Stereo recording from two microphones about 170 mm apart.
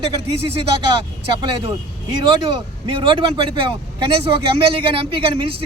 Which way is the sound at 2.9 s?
30° right (ahead or behind).